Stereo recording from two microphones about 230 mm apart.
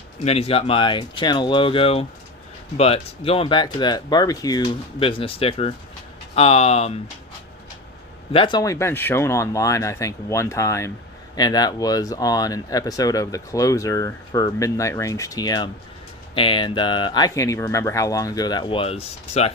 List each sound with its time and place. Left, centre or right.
0.3 s speech: left
8.3 s speech: left